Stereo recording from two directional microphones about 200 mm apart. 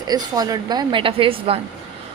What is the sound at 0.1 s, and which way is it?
A woman's voice, 20° right (ahead or behind).